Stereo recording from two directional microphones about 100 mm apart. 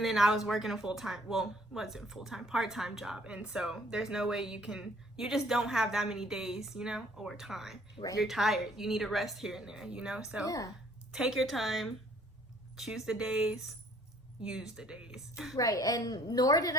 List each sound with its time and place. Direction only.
0.0 s speech: centre (ahead or behind)
10.4 s a woman's voice: 35° left (ahead or behind)
11.1 s speech: 5° right (ahead or behind)
15.5 s a woman's voice: 35° left (ahead or behind)